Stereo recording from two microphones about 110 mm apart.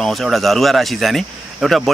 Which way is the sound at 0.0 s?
Centre (ahead or behind).